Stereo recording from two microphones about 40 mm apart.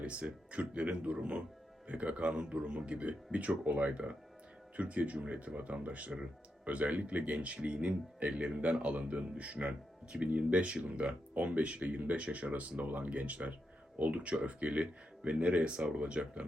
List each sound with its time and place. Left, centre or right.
0.0 s speech: right